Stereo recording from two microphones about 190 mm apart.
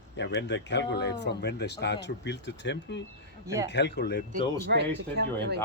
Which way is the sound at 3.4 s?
15° right (ahead or behind).